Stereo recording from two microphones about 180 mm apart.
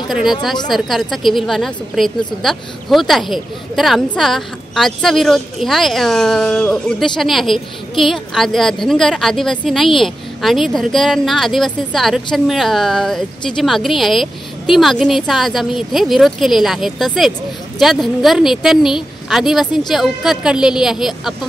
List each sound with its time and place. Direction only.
0.1 s a woman's voice: centre (ahead or behind)